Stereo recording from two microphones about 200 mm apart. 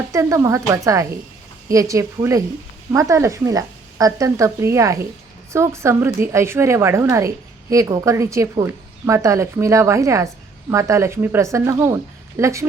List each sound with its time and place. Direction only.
0.1 s speech: 15° right (ahead or behind)